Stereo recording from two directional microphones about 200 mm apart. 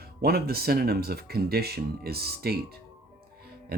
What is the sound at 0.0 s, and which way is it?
Speech, 50° right (ahead or behind).